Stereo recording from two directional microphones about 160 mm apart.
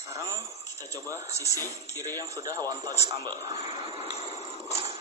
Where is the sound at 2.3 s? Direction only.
20° right (ahead or behind).